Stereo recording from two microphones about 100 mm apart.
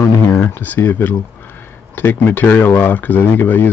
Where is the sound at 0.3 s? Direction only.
20° left (ahead or behind).